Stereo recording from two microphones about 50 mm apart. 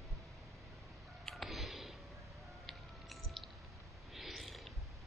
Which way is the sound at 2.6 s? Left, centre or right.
Centre.